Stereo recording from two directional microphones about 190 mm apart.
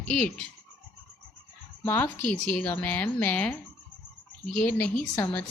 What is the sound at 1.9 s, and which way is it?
Speech, 10° left (ahead or behind).